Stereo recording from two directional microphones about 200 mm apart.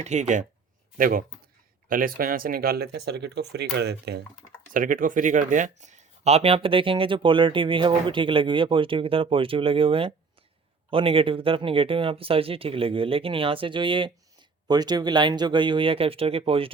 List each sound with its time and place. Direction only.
0.0 s speech: 35° right (ahead or behind); by 4.2 s 55° right (ahead or behind)
4.7 s speech: 40° right (ahead or behind)